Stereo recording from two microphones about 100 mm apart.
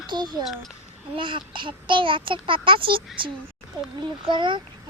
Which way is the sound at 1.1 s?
55° right (ahead or behind).